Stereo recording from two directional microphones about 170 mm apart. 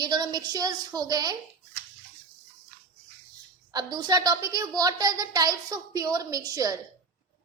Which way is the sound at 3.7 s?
25° right (ahead or behind).